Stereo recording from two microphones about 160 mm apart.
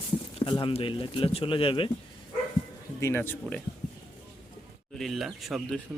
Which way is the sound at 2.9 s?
15° left (ahead or behind).